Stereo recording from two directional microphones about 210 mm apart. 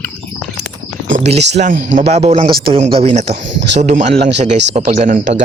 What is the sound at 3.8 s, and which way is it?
A man's voice, 35° right (ahead or behind).